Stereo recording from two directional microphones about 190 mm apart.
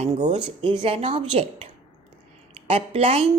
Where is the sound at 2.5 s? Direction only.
35° right (ahead or behind).